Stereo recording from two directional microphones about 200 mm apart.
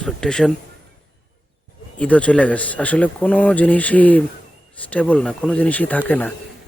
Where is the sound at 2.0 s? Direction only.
5° left (ahead or behind).